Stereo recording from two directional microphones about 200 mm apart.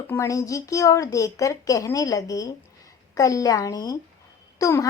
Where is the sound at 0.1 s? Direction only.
15° left (ahead or behind).